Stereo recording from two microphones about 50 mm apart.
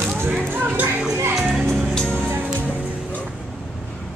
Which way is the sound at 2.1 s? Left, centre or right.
Right.